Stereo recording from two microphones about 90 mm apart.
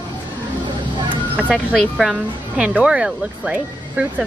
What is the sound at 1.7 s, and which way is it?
Speech, centre (ahead or behind).